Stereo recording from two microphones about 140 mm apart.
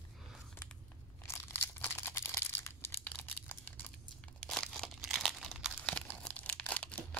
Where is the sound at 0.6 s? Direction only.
15° left (ahead or behind).